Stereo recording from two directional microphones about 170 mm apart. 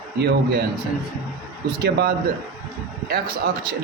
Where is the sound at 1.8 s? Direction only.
65° right (ahead or behind).